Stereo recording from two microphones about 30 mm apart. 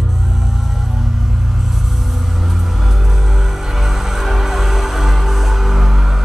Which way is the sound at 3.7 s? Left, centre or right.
Centre.